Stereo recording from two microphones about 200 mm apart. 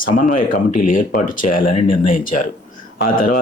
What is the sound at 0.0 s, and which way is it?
A man's voice, 45° left (ahead or behind).